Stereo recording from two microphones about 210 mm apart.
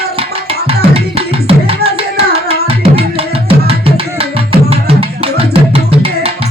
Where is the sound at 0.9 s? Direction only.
25° right (ahead or behind).